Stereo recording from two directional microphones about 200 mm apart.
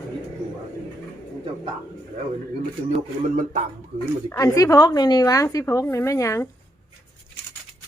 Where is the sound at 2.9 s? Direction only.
40° right (ahead or behind).